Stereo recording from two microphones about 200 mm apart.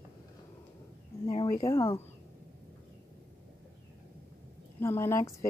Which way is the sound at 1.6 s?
15° left (ahead or behind).